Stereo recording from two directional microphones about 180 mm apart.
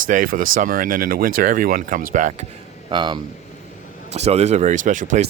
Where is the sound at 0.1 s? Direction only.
50° right (ahead or behind).